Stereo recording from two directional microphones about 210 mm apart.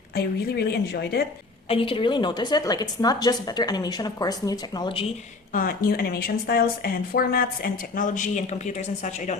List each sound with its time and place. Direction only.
0.1 s speech: 50° left (ahead or behind)
1.6 s a woman's voice: 25° left (ahead or behind)
5.5 s speech: 40° left (ahead or behind)